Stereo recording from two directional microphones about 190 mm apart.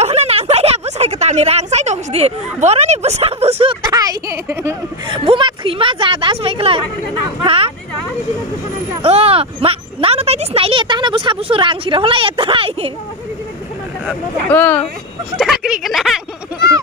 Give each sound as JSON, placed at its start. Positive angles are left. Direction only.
{"t": 0.0, "sound": "speech", "side_deg": -35}
{"t": 3.8, "sound": "speech", "side_deg": -20}
{"t": 5.0, "sound": "speech", "side_deg": -25}
{"t": 9.0, "sound": "speech", "side_deg": -30}
{"t": 14.5, "sound": "speech", "side_deg": 10}
{"t": 15.3, "sound": "speech", "side_deg": 0}